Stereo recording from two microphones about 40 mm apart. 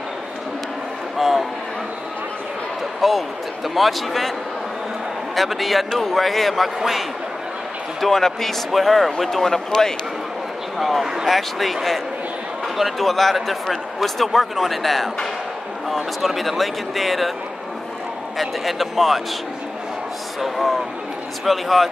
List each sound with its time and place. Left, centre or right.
1.1 s a sound: centre
3.0 s a man's voice: centre
5.3 s a man's voice: centre
8.0 s a man's voice: centre
10.8 s a man's voice: centre
18.4 s a man's voice: centre
20.3 s a man's voice: centre